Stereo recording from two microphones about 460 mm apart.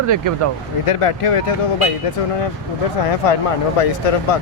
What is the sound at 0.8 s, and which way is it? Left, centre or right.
Speech, left.